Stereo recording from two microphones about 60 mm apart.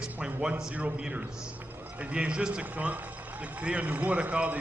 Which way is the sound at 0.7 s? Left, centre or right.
Right.